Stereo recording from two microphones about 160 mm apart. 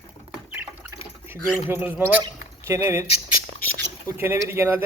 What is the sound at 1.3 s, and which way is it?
Speech, 10° right (ahead or behind).